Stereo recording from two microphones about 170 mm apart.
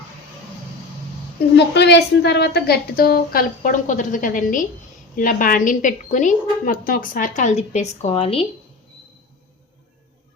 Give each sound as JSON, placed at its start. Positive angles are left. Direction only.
{"t": 1.5, "sound": "a woman's voice", "side_deg": 90}